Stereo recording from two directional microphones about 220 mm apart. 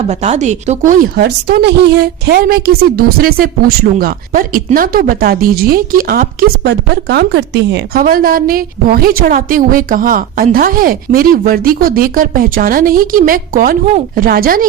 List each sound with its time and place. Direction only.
0.1 s a woman's voice: 30° right (ahead or behind)
1.2 s a woman's voice: 50° right (ahead or behind)